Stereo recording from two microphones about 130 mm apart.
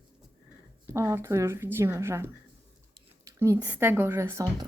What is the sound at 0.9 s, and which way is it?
Speech, 20° right (ahead or behind).